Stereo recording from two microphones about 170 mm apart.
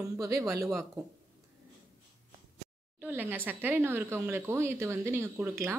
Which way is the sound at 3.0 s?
10° right (ahead or behind).